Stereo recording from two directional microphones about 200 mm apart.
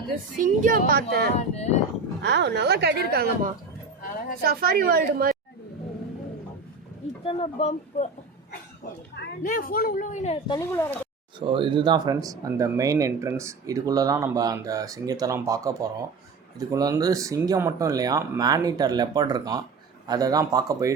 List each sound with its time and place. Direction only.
0.3 s a woman's voice: 40° right (ahead or behind)
1.4 s a woman's voice: 35° left (ahead or behind)
2.2 s a woman's voice: 60° right (ahead or behind)
7.3 s a woman's voice: 30° left (ahead or behind)
9.1 s speech: 55° left (ahead or behind)
9.5 s a woman's voice: 45° left (ahead or behind)
10.6 s speech: 15° left (ahead or behind)
11.3 s speech: 25° right (ahead or behind)